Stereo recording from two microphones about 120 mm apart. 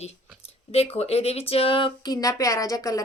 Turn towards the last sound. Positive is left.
turn(degrees=30)  # may be behind; listen again after turning